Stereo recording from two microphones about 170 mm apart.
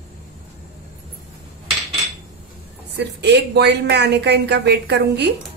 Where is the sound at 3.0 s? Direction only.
80° right.